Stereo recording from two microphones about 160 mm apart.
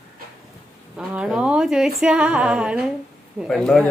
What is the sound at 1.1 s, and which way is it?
A man's voice, 5° right (ahead or behind).